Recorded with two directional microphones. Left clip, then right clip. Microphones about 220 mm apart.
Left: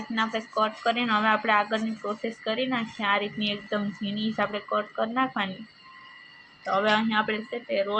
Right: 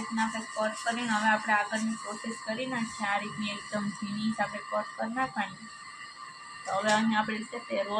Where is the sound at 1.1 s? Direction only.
35° left (ahead or behind).